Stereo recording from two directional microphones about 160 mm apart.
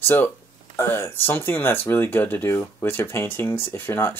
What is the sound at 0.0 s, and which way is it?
Speech, 15° left (ahead or behind).